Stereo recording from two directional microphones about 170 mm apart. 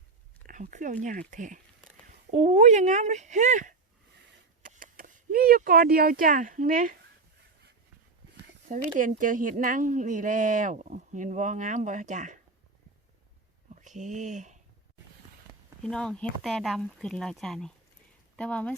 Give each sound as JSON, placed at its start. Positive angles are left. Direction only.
{"t": 0.4, "sound": "speech", "side_deg": -50}
{"t": 9.0, "sound": "speech", "side_deg": -50}
{"t": 13.7, "sound": "speech", "side_deg": -45}
{"t": 15.8, "sound": "speech", "side_deg": 5}